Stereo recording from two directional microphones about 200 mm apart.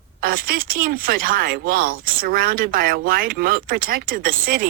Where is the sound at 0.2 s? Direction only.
45° right (ahead or behind).